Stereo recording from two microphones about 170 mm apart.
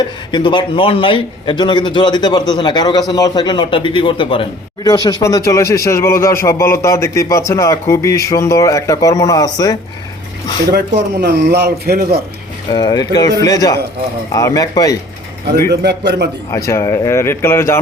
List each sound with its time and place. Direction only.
0.0 s a man's voice: 25° left (ahead or behind)
10.7 s speech: 75° right (ahead or behind)
12.7 s a man's voice: 25° left (ahead or behind)
15.7 s speech: 75° right (ahead or behind)
16.6 s speech: 15° left (ahead or behind)